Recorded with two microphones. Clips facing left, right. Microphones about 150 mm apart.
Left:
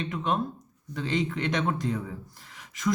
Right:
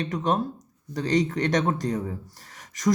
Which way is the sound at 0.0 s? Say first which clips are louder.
Right 3 dB; 40° right (ahead or behind).